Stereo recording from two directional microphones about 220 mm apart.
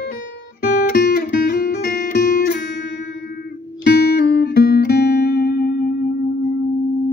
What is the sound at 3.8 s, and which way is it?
Music, 45° left (ahead or behind).